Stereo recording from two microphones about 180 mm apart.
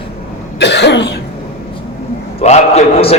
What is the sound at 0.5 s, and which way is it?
Speech, 75° left (ahead or behind).